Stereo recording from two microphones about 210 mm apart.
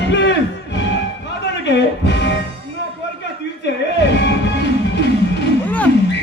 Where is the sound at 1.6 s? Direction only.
55° left (ahead or behind).